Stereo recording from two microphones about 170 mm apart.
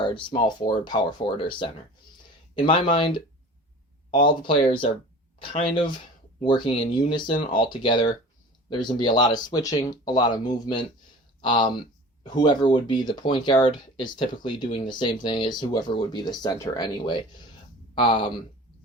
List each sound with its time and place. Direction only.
0.0 s speech: 30° left (ahead or behind)